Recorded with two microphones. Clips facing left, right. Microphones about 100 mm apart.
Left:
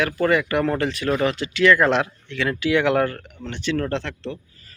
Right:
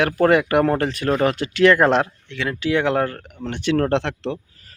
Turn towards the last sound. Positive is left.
turn(degrees=-75)  # may be behind; listen again after turning